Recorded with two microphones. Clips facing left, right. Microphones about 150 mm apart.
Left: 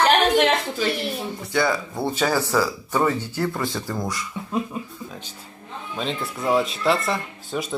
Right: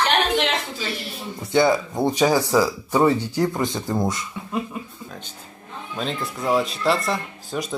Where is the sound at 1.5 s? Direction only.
20° right (ahead or behind).